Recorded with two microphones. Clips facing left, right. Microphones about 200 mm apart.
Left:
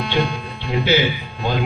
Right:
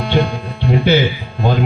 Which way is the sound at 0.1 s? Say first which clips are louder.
Right 7 dB; 55° right (ahead or behind).